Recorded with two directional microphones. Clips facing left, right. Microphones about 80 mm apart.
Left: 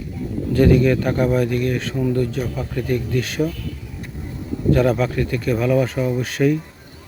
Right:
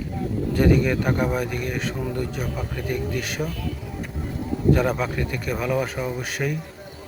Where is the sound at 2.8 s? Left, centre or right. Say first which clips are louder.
Left 5 dB; centre.